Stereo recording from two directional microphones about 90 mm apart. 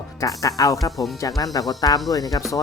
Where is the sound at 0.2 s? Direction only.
40° left (ahead or behind).